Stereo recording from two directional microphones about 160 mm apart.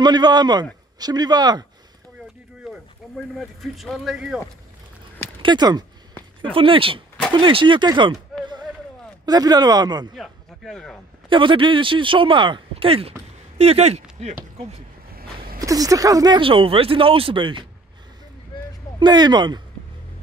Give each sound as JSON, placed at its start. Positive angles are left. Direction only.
{"t": 0.0, "sound": "speech", "side_deg": -25}
{"t": 3.3, "sound": "speech", "side_deg": 0}
{"t": 5.4, "sound": "speech", "side_deg": -25}
{"t": 10.1, "sound": "speech", "side_deg": 0}
{"t": 11.2, "sound": "speech", "side_deg": -30}
{"t": 15.1, "sound": "a sound", "side_deg": -65}
{"t": 15.6, "sound": "speech", "side_deg": -20}
{"t": 18.9, "sound": "speech", "side_deg": -25}